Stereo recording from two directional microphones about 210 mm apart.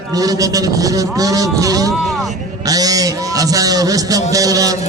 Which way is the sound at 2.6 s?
15° right (ahead or behind).